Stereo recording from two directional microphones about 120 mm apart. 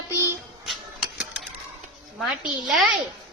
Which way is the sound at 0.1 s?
20° right (ahead or behind).